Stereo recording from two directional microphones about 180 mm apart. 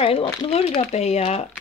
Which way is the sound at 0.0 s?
30° left (ahead or behind).